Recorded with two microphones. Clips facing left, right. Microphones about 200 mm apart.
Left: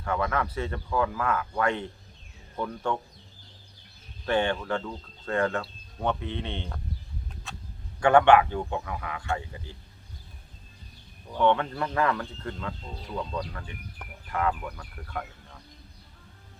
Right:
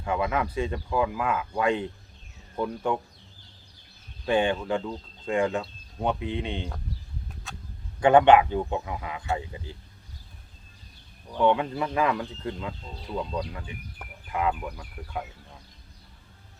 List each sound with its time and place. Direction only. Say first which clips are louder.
0.0 s speech: right 1 dB; 15° right (ahead or behind)
4.3 s speech: right 2 dB; 15° right (ahead or behind)
7.5 s a sound: left 1 dB; centre (ahead or behind)
8.0 s speech: right 2 dB; 20° right (ahead or behind)
11.3 s speech: right 1 dB; 15° right (ahead or behind)